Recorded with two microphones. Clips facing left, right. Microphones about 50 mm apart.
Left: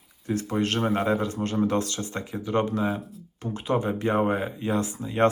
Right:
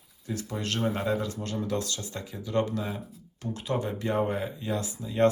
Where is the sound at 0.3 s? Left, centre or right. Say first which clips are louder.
Left 7 dB; left.